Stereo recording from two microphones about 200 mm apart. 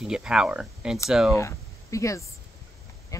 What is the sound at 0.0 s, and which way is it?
Speech, 5° right (ahead or behind).